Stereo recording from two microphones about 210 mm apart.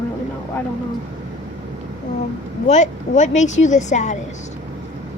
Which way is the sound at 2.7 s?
35° left (ahead or behind).